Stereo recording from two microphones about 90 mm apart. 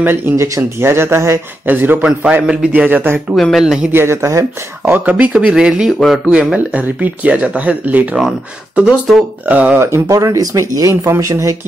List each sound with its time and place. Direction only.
0.0 s speech: 25° right (ahead or behind)
3.3 s speech: centre (ahead or behind)
3.9 s speech: 30° right (ahead or behind)
5.1 s speech: 10° right (ahead or behind)
6.3 s speech: 15° right (ahead or behind)
9.9 s speech: 40° right (ahead or behind)